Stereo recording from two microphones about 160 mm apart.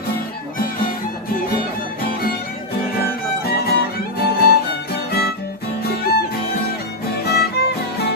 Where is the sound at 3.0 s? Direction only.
75° left (ahead or behind).